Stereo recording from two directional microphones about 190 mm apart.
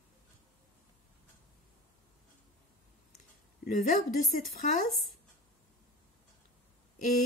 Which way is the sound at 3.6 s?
45° left (ahead or behind).